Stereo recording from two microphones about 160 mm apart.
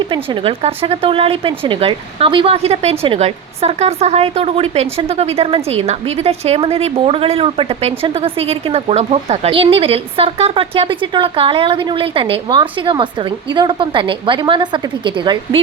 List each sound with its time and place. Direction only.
0.0 s speech: 30° right (ahead or behind)